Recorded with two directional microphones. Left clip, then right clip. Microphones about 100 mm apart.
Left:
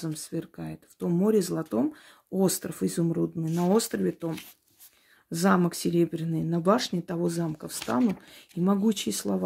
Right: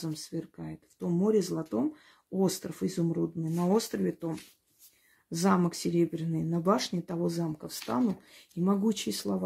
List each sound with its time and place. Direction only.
0.0 s speech: 25° left (ahead or behind)